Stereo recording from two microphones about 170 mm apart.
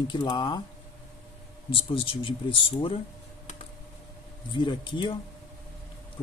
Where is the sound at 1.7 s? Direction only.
30° left (ahead or behind).